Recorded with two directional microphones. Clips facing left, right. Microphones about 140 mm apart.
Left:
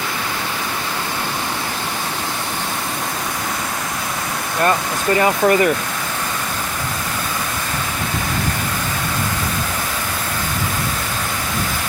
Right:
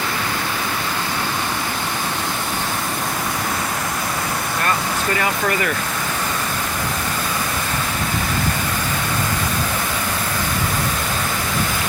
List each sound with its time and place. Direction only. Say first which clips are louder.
5.1 s speech: left 9 dB; 25° left (ahead or behind)